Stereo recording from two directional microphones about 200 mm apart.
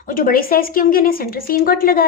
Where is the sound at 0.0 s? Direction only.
45° left (ahead or behind).